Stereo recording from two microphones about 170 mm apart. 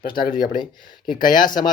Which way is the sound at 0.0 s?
60° left (ahead or behind).